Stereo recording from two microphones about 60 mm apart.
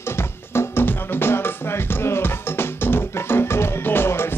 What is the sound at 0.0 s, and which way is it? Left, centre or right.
Music, left.